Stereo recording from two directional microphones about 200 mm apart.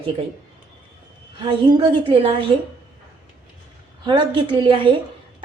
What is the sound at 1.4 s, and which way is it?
Speech, 25° right (ahead or behind).